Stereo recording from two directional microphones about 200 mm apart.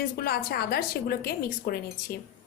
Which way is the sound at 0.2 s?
50° left (ahead or behind).